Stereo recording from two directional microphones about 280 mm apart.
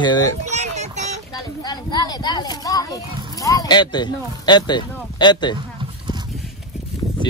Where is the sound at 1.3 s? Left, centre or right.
Centre.